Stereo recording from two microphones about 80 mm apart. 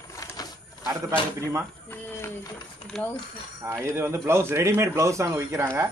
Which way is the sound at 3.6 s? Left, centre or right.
Right.